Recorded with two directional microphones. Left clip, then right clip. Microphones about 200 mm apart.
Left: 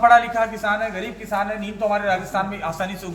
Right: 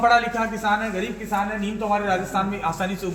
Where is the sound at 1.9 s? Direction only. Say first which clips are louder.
Left 1 dB; 20° left (ahead or behind).